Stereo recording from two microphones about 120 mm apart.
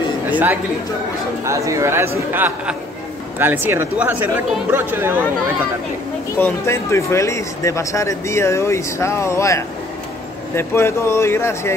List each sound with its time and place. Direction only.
0.3 s speech: 15° right (ahead or behind)
1.4 s speech: 25° right (ahead or behind)
6.3 s speech: 20° left (ahead or behind)